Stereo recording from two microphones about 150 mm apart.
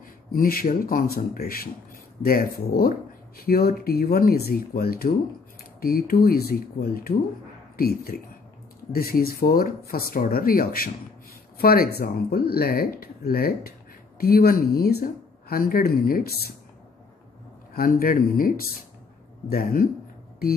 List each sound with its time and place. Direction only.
0.3 s speech: 80° left
17.7 s speech: 75° left (ahead or behind)